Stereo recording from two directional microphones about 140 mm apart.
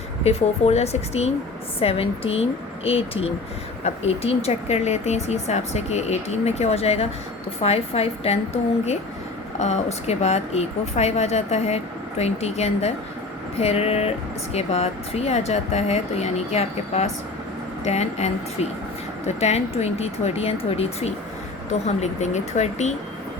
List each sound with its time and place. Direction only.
0.3 s speech: 45° left (ahead or behind)
9.6 s speech: 55° left (ahead or behind)